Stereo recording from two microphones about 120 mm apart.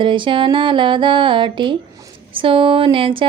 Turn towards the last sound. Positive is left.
turn(degrees=-45)  # may be behind; listen again after turning